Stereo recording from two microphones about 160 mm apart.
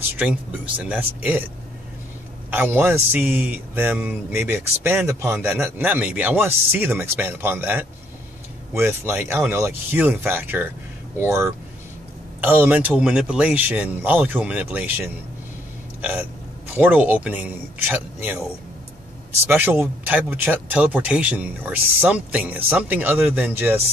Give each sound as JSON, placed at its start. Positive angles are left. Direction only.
{"t": 0.2, "sound": "speech", "side_deg": -10}
{"t": 2.5, "sound": "speech", "side_deg": -15}
{"t": 16.0, "sound": "hiccup", "side_deg": -10}
{"t": 16.7, "sound": "speech", "side_deg": -10}
{"t": 19.4, "sound": "speech", "side_deg": -15}